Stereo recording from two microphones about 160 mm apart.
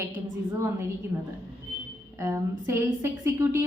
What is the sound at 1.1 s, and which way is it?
A woman's voice, 25° right (ahead or behind).